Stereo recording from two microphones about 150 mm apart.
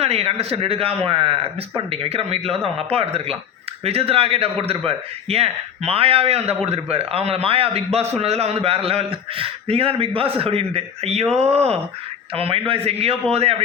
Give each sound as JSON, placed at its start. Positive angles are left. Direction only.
{"t": 0.0, "sound": "a man's voice", "side_deg": -40}